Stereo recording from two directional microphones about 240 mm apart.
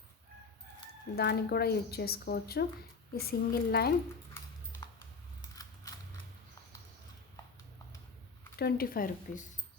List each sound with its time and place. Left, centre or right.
1.1 s speech: left
8.5 s speech: left